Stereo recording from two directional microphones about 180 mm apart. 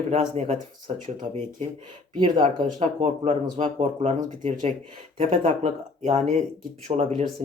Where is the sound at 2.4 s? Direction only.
35° right (ahead or behind).